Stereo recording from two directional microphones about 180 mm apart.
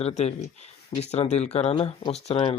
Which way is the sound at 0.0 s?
35° left (ahead or behind).